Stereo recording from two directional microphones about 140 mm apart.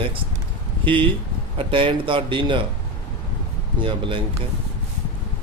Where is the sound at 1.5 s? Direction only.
40° right (ahead or behind).